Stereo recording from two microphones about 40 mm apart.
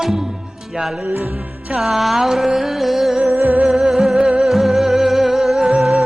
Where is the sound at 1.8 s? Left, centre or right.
Centre.